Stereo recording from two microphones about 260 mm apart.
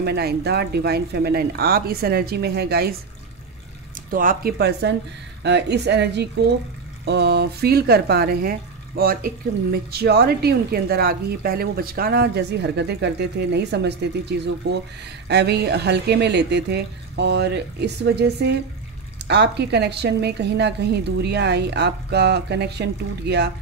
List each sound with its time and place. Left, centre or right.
0.0 s a woman's voice: right
4.1 s a woman's voice: right